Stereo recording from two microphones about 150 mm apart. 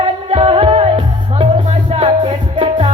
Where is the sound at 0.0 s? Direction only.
35° right (ahead or behind).